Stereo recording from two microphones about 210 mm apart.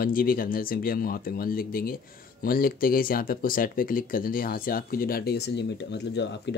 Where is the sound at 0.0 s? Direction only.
45° left (ahead or behind).